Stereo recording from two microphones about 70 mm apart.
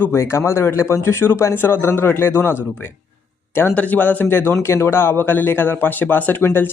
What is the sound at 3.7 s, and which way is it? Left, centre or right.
Speech, left.